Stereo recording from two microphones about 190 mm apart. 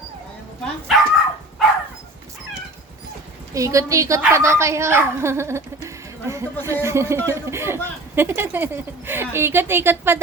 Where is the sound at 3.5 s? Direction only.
15° right (ahead or behind).